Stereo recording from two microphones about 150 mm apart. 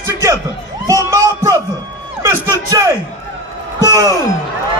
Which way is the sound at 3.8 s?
25° right (ahead or behind).